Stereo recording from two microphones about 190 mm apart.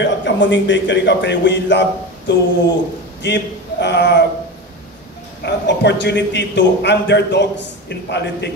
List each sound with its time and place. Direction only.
0.0 s a man's voice: 70° left (ahead or behind)
5.4 s a man's voice: 65° left (ahead or behind)